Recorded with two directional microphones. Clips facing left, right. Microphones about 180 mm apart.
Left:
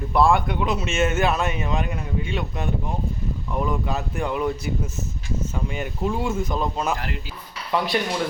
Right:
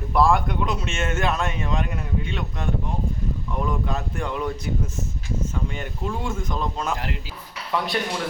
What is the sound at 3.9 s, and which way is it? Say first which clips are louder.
Speech: left 2 dB; 5° left (ahead or behind).